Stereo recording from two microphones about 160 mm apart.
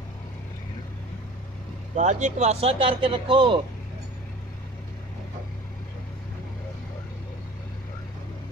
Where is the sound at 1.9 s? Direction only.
50° right (ahead or behind); by 3.6 s 30° right (ahead or behind).